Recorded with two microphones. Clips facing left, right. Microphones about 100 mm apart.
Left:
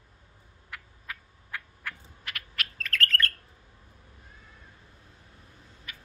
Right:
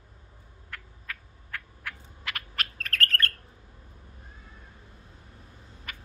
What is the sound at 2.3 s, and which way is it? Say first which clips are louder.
Owl: right 4 dB; 90° right.